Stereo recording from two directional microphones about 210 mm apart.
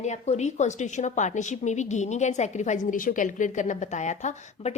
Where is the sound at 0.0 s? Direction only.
35° left (ahead or behind).